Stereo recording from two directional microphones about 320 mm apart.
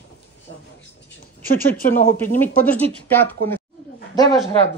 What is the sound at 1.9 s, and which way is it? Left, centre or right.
Speech, centre.